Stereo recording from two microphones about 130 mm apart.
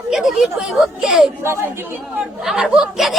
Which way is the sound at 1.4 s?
20° right (ahead or behind).